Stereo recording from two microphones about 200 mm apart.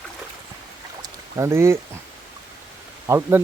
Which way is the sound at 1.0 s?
15° right (ahead or behind).